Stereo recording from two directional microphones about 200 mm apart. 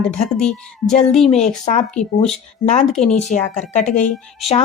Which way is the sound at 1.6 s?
35° left (ahead or behind).